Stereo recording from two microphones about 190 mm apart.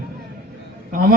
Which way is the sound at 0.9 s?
50° right (ahead or behind).